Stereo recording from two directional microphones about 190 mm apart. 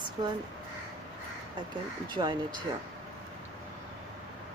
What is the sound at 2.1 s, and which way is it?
Speech, 25° right (ahead or behind).